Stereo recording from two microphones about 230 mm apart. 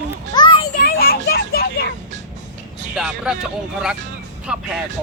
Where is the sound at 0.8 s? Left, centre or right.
Left.